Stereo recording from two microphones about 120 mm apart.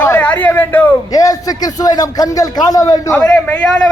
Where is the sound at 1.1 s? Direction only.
30° left (ahead or behind).